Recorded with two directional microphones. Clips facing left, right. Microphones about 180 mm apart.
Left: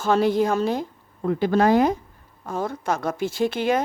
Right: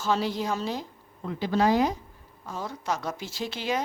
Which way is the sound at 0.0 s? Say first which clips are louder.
Left 8 dB; 55° left (ahead or behind).